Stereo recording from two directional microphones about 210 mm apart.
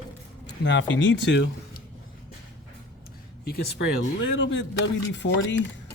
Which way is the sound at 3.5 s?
50° left (ahead or behind).